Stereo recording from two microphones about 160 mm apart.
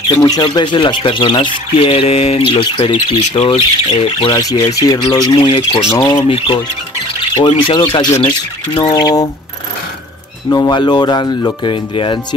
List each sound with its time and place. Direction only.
0.1 s speech: 25° left (ahead or behind)
4.3 s speech: 20° left (ahead or behind)
5.6 s speech: 35° left (ahead or behind)
5.9 s speech: 20° left (ahead or behind)
10.5 s speech: 25° left (ahead or behind)